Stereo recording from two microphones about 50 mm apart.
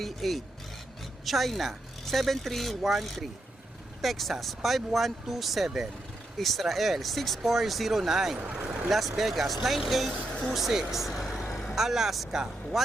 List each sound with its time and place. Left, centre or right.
0.0 s speech: centre
8.4 s speech: right
8.9 s speech: centre